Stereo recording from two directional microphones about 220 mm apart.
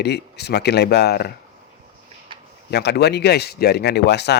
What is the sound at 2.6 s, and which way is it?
Speech, 50° left (ahead or behind).